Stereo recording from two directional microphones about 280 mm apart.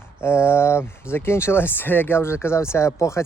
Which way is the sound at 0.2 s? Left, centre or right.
Centre.